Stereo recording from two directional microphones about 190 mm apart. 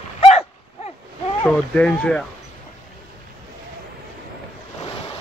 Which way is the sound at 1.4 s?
5° left (ahead or behind).